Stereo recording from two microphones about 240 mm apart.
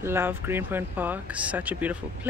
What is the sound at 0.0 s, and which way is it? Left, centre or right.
Speech, centre.